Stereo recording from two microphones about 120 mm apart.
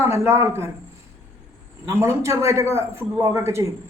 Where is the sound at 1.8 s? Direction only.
20° right (ahead or behind).